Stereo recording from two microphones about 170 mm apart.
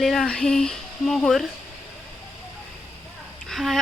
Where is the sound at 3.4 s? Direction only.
Centre (ahead or behind).